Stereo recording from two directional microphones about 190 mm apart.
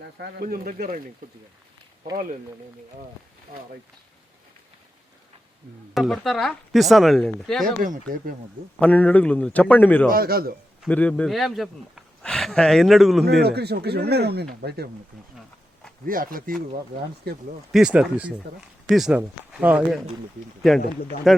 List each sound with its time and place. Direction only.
0.0 s speech: 60° right (ahead or behind)
0.4 s speech: 50° right (ahead or behind)
5.9 s a man's voice: centre (ahead or behind)
7.8 s speech: 50° right (ahead or behind)
8.8 s a man's voice: 10° left (ahead or behind)
10.1 s speech: 50° right (ahead or behind)
10.8 s a man's voice: 5° left (ahead or behind)
13.4 s speech: 60° right (ahead or behind)
16.0 s speech: 50° right (ahead or behind)
17.7 s a man's voice: 5° right (ahead or behind)